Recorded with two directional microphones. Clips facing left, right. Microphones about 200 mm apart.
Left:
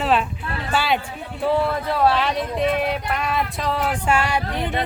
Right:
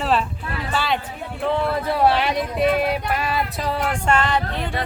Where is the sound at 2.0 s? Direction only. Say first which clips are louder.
Even; 15° right (ahead or behind); by 4.8 s 20° left (ahead or behind).